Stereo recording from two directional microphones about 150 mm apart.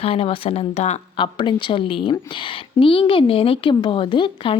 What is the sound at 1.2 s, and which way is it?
A woman's voice, 30° left (ahead or behind).